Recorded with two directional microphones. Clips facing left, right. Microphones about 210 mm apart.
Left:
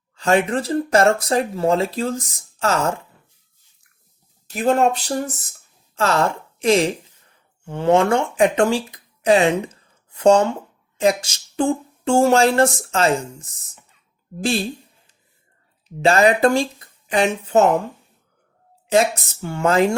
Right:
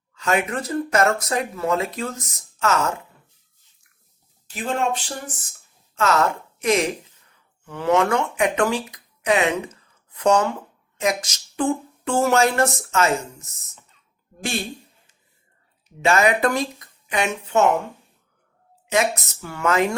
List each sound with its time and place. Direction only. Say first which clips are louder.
0.1 s speech: left 5 dB; 30° left (ahead or behind)
4.4 s speech: left 7 dB; 40° left (ahead or behind)
18.9 s speech: left 4 dB; 30° left (ahead or behind)